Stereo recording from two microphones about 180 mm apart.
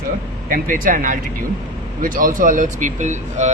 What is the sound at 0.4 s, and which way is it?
Speech, 50° right (ahead or behind).